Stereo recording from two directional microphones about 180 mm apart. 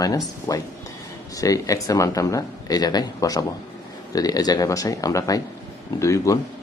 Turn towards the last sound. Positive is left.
turn(degrees=15)  # may be behind; listen again after turning